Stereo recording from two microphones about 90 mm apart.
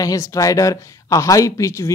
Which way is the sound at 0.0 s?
40° left (ahead or behind).